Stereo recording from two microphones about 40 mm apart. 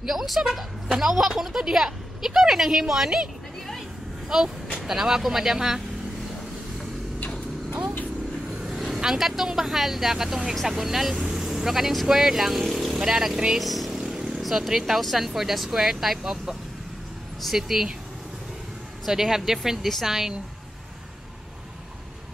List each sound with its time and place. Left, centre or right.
0.0 s speech: centre
4.3 s speech: centre
8.7 s speech: centre
14.1 s vehicle: centre
14.4 s vehicle: centre
14.7 s speech: centre
19.0 s speech: centre